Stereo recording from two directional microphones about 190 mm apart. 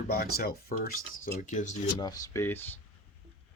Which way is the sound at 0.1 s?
50° left (ahead or behind).